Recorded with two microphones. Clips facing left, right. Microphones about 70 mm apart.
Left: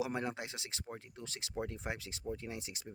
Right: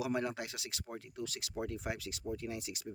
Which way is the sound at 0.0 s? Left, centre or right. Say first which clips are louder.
Right 2 dB; left.